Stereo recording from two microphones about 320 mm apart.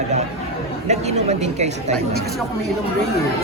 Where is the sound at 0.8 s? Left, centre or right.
Right.